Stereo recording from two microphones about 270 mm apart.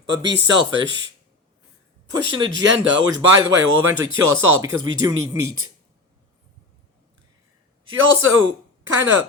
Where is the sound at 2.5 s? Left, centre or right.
Right.